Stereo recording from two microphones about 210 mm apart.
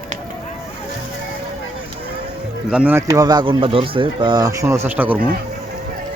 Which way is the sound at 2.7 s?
5° right (ahead or behind).